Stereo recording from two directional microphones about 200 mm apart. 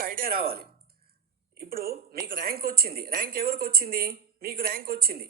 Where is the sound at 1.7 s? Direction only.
50° right (ahead or behind).